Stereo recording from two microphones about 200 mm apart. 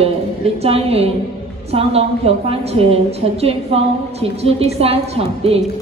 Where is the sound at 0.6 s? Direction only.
30° right (ahead or behind).